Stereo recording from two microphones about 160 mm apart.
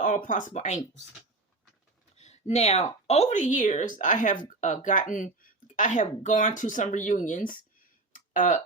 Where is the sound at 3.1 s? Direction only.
45° left (ahead or behind).